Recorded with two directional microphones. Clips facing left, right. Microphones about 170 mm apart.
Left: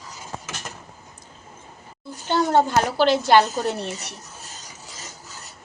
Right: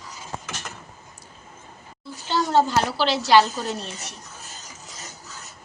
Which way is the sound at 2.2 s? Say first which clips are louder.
Left 2 dB; 55° left (ahead or behind).